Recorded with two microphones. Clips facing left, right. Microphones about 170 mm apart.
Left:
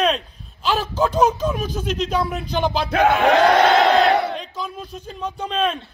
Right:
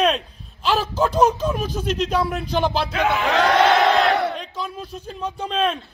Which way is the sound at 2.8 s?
55° left (ahead or behind).